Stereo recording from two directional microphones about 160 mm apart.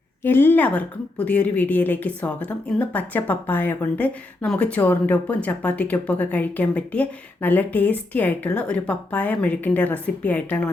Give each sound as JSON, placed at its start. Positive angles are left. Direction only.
{"t": 0.2, "sound": "a woman's voice", "side_deg": 15}